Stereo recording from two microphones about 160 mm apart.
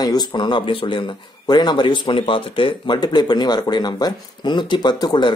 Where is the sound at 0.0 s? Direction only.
25° left (ahead or behind).